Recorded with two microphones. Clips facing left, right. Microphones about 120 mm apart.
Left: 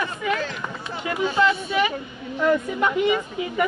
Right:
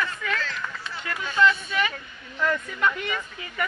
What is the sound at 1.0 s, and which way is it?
Speech, 20° left (ahead or behind).